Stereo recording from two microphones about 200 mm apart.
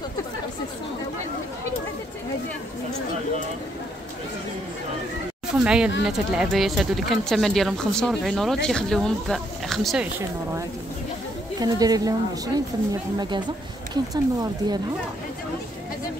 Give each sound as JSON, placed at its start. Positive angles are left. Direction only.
{"t": 5.5, "sound": "a sound", "side_deg": -5}
{"t": 6.0, "sound": "speech", "side_deg": -5}
{"t": 11.6, "sound": "a woman's voice", "side_deg": -20}
{"t": 14.1, "sound": "a woman's voice", "side_deg": -20}